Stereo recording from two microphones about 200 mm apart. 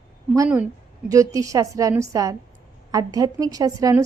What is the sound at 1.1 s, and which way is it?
A woman's voice, 15° right (ahead or behind).